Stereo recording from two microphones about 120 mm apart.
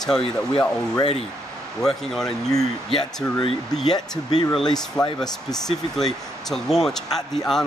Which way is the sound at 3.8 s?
35° left (ahead or behind).